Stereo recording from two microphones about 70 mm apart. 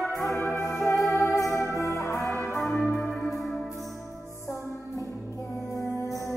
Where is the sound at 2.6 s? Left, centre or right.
Centre.